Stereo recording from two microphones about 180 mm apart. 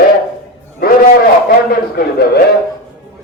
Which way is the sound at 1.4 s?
55° left (ahead or behind).